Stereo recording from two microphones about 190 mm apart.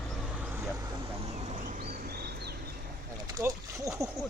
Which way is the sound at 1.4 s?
45° right (ahead or behind).